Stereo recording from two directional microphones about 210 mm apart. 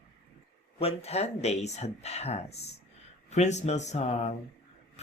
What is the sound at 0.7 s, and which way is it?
Speech, 30° left (ahead or behind).